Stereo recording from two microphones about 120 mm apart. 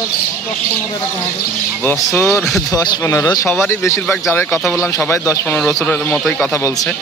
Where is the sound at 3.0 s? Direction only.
25° left (ahead or behind).